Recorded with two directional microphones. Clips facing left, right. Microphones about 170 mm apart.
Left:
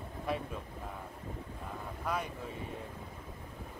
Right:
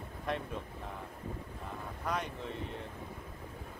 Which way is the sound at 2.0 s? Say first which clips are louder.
Even; 5° left (ahead or behind).